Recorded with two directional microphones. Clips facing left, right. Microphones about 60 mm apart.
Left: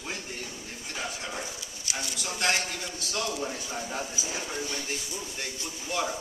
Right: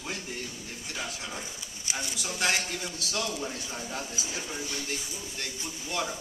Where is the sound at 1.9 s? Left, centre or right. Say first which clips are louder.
Even; right.